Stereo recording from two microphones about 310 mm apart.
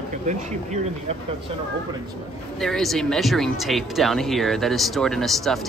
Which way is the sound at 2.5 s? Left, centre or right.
Centre.